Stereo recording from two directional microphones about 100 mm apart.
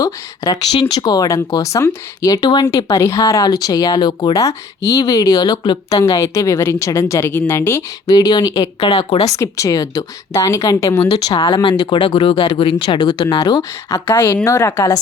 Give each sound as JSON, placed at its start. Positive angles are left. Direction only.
{"t": 0.0, "sound": "speech", "side_deg": 40}
{"t": 0.7, "sound": "speech", "side_deg": 60}
{"t": 0.9, "sound": "speech", "side_deg": 40}
{"t": 2.3, "sound": "speech", "side_deg": 40}
{"t": 8.0, "sound": "speech", "side_deg": 40}
{"t": 8.9, "sound": "speech", "side_deg": 90}
{"t": 9.3, "sound": "speech", "side_deg": 30}
{"t": 12.8, "sound": "speech", "side_deg": 50}
{"t": 14.0, "sound": "a woman's voice", "side_deg": 20}